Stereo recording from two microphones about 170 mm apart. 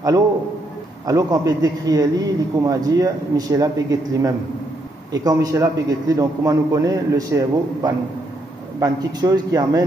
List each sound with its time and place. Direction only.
1.0 s a man's voice: 20° right (ahead or behind)